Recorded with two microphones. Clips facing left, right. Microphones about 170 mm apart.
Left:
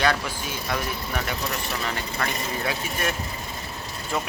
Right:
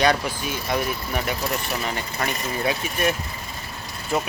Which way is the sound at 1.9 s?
20° right (ahead or behind).